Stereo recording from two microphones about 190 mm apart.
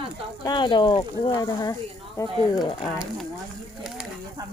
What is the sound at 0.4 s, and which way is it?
Speech, 25° left (ahead or behind).